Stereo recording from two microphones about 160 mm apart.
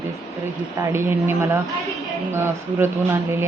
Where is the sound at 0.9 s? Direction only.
15° right (ahead or behind).